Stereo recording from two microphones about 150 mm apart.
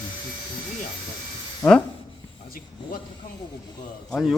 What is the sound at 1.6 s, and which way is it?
Speech, 20° left (ahead or behind).